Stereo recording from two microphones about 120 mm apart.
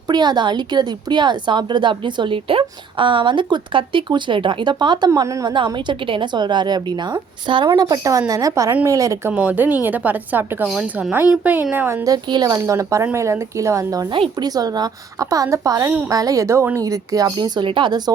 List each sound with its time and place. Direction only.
0.1 s a woman's voice: 40° right (ahead or behind)
5.5 s a woman's voice: 40° right (ahead or behind)
9.3 s a woman's voice: 15° right (ahead or behind)
12.0 s speech: 35° right (ahead or behind)
14.1 s a woman's voice: 40° right (ahead or behind)